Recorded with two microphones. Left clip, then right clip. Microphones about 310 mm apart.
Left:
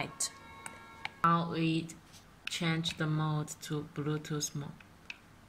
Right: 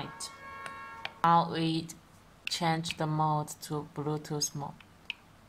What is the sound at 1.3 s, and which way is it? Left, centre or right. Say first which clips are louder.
Speech: right 8 dB; right.